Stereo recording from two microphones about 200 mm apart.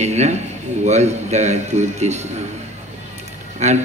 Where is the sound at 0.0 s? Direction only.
35° right (ahead or behind).